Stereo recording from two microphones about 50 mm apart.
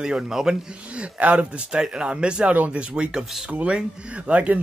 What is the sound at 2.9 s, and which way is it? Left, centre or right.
A man's voice, right.